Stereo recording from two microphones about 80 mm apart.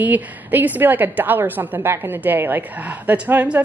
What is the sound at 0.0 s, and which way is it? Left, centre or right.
A woman's voice, right.